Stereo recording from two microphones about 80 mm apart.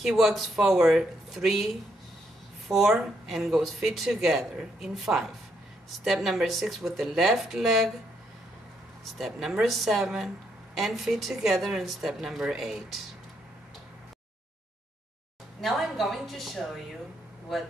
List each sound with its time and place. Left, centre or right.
0.1 s speech: centre
9.4 s speech: centre
15.6 s speech: centre